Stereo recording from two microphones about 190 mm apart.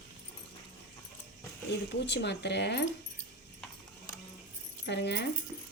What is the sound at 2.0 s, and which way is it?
Speech, 65° left (ahead or behind).